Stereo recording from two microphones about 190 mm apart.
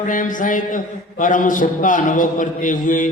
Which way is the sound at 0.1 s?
45° left (ahead or behind).